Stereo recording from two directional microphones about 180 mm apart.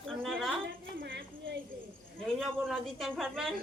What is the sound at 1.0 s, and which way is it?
Speech, 75° right (ahead or behind).